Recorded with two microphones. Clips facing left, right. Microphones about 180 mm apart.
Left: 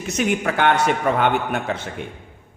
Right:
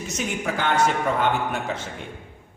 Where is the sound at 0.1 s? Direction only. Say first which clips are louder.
Left 7 dB; 65° left (ahead or behind).